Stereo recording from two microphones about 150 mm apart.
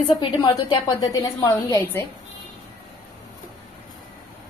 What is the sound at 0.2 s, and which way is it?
A woman's voice, 30° left (ahead or behind).